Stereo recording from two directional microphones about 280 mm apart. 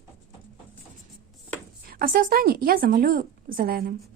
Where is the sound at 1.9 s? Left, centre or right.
Right.